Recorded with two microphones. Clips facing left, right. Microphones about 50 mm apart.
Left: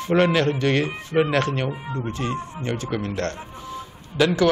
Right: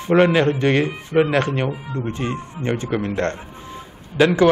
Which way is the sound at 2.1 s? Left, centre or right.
Right.